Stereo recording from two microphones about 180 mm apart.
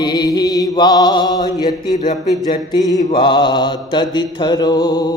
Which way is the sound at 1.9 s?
40° left (ahead or behind).